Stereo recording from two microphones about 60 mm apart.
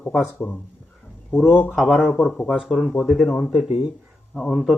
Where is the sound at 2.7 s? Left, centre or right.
Centre.